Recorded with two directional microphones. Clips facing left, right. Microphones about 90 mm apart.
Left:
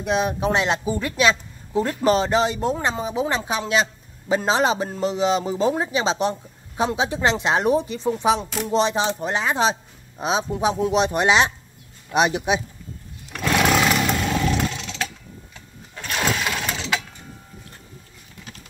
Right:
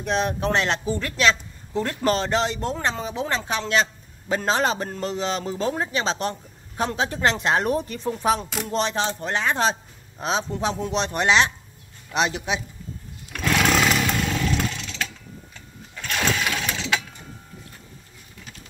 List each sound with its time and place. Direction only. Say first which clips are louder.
0.0 s speech: left 2 dB; 5° left (ahead or behind)
13.4 s roaring cats: left 2 dB; 10° left (ahead or behind)
14.1 s motorcycle: left 3 dB; 30° left (ahead or behind)
15.9 s sewing machine: left 1 dB; 20° left (ahead or behind)